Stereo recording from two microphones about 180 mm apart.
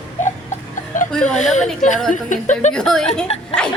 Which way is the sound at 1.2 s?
40° left (ahead or behind).